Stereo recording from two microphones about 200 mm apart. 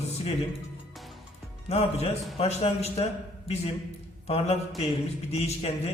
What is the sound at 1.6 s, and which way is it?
Speech, 30° left (ahead or behind).